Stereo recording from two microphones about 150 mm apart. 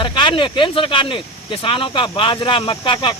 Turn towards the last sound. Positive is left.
turn(degrees=35)  # may be behind; listen again after turning